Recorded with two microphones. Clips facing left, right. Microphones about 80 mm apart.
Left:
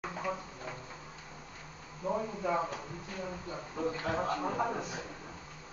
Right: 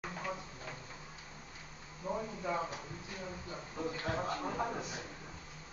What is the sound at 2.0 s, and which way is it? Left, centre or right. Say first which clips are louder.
Speech: left 5 dB; centre.